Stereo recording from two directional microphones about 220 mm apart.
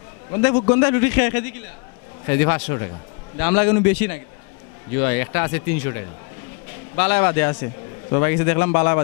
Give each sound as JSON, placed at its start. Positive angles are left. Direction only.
{"t": 0.4, "sound": "a man's voice", "side_deg": 15}